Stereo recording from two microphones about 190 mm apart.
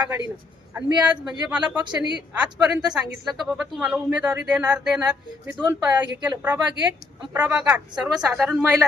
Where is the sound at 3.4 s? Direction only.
5° right (ahead or behind).